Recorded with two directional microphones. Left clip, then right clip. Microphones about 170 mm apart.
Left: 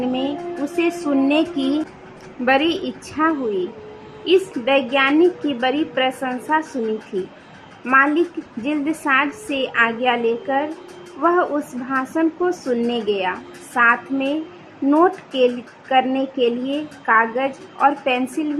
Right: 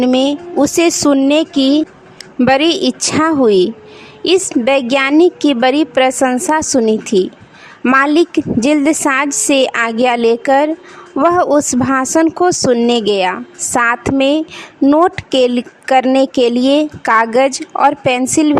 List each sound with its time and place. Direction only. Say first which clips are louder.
0.0 s speech: right 10 dB; 85° right; by 1.8 s 55° right (ahead or behind)
2.4 s speech: right 7 dB; 75° right (ahead or behind)
4.2 s a woman's voice: right 5 dB; 90° right; by 6.7 s 70° right (ahead or behind)
7.9 s a woman's voice: right 5 dB; 75° right (ahead or behind)
11.2 s a woman's voice: right 7 dB; 75° right (ahead or behind)